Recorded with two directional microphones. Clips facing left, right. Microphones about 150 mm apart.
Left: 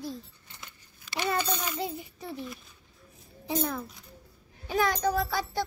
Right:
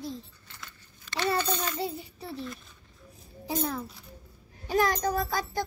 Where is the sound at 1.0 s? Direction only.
10° left (ahead or behind).